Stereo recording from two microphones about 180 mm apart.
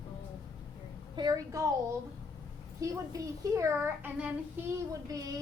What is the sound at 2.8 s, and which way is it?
A child's voice, 20° right (ahead or behind).